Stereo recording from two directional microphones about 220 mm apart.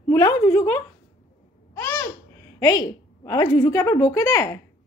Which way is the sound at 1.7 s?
10° left (ahead or behind).